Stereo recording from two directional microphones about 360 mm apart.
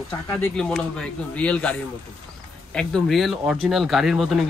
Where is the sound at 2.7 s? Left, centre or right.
Centre.